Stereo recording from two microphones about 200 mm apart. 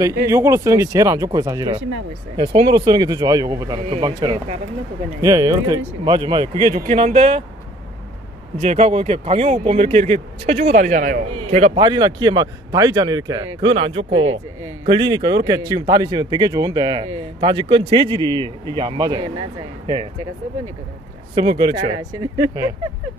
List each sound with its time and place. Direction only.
0.3 s speech: 15° right (ahead or behind); by 7.4 s 30° right (ahead or behind)
8.5 s speech: 30° right (ahead or behind)
11.3 s speech: 30° right (ahead or behind)
21.4 s speech: 25° right (ahead or behind)